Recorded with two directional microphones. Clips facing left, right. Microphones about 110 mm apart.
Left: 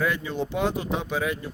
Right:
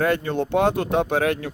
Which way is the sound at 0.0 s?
60° right (ahead or behind).